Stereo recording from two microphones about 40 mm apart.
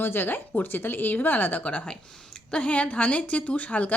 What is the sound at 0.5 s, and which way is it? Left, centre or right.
Speech, left.